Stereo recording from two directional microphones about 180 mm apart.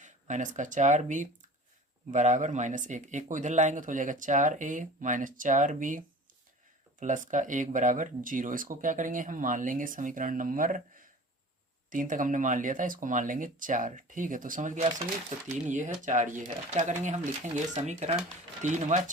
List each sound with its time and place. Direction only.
0.0 s speech: 45° right (ahead or behind)
7.0 s speech: 45° right (ahead or behind)